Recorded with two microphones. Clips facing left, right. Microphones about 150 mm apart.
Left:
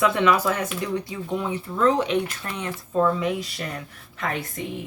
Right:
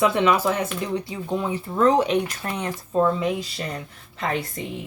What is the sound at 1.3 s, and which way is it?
Speech, 35° right (ahead or behind).